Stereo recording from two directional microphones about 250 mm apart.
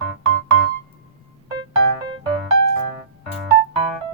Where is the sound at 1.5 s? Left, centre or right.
Centre.